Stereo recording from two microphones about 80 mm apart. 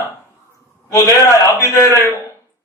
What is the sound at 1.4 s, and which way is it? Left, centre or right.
Speech, left.